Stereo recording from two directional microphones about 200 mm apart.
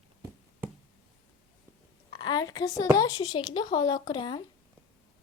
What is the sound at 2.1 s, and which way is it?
A woman's voice, 20° left (ahead or behind).